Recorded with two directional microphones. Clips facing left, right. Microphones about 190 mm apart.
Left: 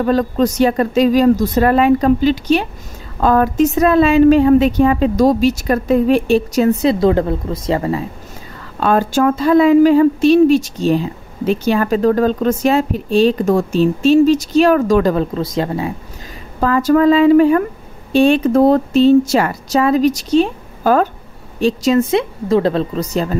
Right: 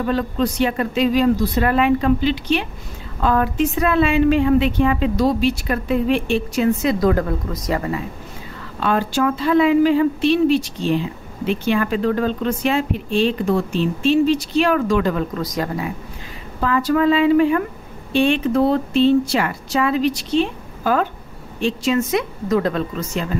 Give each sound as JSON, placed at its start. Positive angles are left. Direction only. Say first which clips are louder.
{"t": 0.0, "sound": "speech", "louder": "left 5 dB", "side_deg": 40}
{"t": 8.7, "sound": "speech", "louder": "left 5 dB", "side_deg": 45}
{"t": 16.5, "sound": "speech", "louder": "left 5 dB", "side_deg": 45}